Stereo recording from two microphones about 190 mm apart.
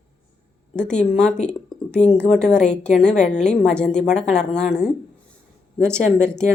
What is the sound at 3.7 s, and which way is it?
A woman's voice, 5° left (ahead or behind).